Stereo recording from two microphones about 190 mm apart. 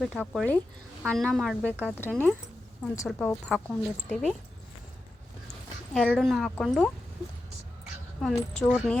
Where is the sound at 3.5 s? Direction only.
Centre (ahead or behind).